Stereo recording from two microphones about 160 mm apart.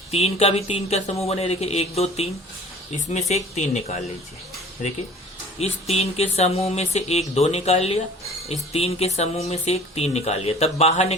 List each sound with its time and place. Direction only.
0.1 s speech: 40° left (ahead or behind)
5.5 s speech: 40° left (ahead or behind)